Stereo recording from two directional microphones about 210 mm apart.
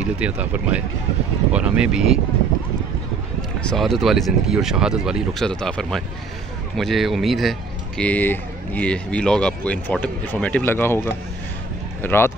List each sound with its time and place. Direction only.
0.2 s speech: 5° right (ahead or behind)
3.6 s speech: centre (ahead or behind)